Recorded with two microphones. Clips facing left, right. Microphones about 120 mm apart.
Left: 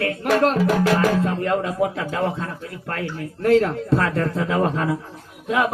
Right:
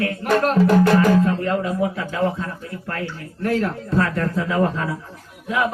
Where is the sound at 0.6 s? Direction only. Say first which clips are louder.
Right 3 dB; 5° left (ahead or behind).